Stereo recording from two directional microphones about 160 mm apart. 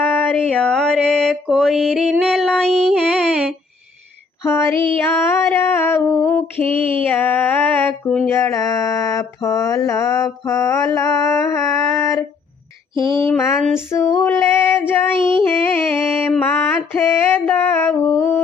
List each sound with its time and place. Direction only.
0.0 s mantra: 10° left (ahead or behind)
4.4 s music: 15° left (ahead or behind)
13.0 s a sound: 20° left (ahead or behind)
13.7 s music: 15° left (ahead or behind)